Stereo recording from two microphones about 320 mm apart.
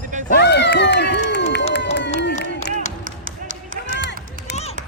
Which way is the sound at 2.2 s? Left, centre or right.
Left.